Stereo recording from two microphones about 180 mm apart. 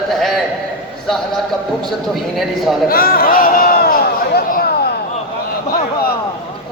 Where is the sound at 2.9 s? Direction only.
55° left (ahead or behind).